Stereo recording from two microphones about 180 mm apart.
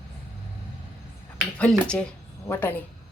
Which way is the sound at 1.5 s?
5° left (ahead or behind).